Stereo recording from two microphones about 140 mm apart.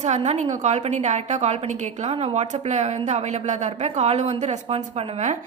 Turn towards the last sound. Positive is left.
turn(degrees=-55)  # may be behind; listen again after turning